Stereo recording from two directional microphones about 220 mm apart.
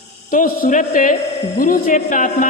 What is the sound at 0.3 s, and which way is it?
Speech, 40° left (ahead or behind).